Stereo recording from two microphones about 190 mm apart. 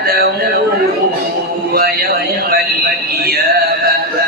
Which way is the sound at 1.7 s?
55° right (ahead or behind).